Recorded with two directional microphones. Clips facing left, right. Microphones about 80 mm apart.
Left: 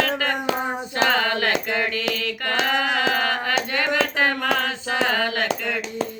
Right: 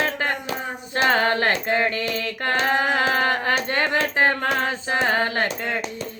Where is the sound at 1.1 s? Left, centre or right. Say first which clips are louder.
Right 4 dB; right.